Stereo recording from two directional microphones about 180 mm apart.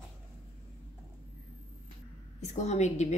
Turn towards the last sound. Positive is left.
turn(degrees=40)  # may be behind; listen again after turning